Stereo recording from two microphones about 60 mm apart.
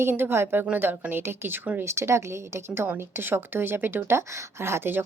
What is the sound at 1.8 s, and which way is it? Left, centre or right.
A woman's voice, right.